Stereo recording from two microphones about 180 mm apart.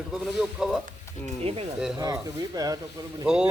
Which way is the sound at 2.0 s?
20° right (ahead or behind).